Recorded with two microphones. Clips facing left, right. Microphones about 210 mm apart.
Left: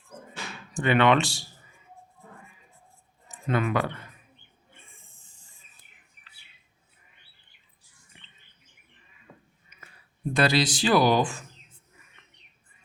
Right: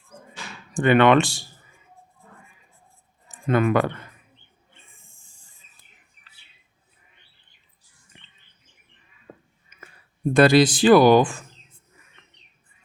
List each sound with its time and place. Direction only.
0.7 s speech: 50° right (ahead or behind)
3.3 s speech: 50° right (ahead or behind)
9.3 s a sound: 50° right (ahead or behind)
10.3 s speech: 50° right (ahead or behind)